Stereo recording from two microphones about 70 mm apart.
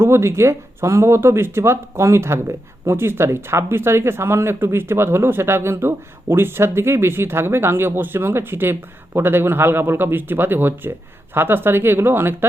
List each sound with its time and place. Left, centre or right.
0.0 s speech: right